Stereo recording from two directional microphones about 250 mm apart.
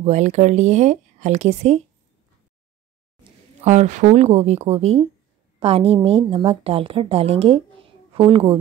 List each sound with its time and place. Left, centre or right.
0.0 s a woman's voice: right
3.6 s a woman's voice: right